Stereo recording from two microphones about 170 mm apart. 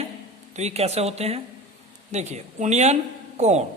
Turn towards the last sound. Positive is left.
turn(degrees=-40)  # may be behind; listen again after turning